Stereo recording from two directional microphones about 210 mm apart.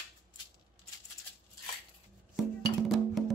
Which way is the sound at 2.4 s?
Centre (ahead or behind).